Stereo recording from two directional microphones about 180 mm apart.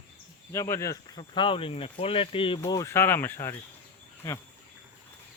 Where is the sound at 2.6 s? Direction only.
20° left (ahead or behind).